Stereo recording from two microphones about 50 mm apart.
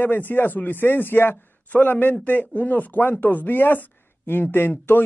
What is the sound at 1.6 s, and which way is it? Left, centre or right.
Speech, left.